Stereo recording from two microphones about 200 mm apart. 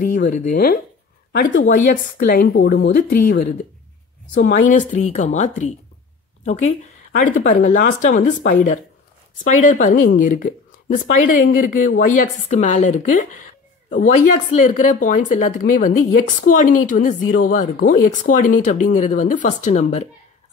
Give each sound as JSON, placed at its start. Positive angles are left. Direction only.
{"t": 0.3, "sound": "speech", "side_deg": 40}